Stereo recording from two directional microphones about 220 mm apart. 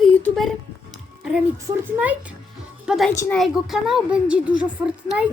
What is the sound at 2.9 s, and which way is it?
A woman's voice, centre (ahead or behind).